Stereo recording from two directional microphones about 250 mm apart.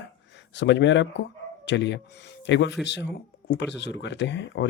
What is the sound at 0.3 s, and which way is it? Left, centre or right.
Speech, left.